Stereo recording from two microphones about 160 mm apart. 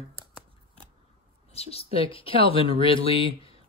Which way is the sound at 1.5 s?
40° left (ahead or behind).